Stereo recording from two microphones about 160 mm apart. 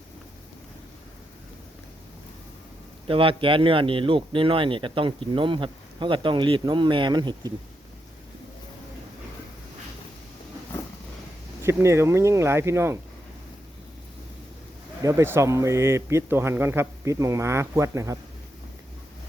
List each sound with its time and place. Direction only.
3.1 s speech: 35° right (ahead or behind)
10.7 s a sound: 15° left (ahead or behind)
11.6 s a man's voice: 15° right (ahead or behind)
15.0 s a man's voice: 15° right (ahead or behind)